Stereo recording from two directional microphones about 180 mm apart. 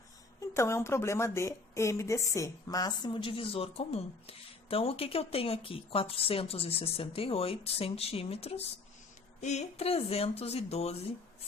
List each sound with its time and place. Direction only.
0.5 s a woman's voice: 15° left (ahead or behind); by 10.9 s 35° left (ahead or behind)